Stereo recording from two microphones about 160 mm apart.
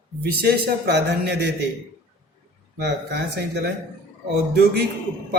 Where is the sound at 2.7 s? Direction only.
90° right.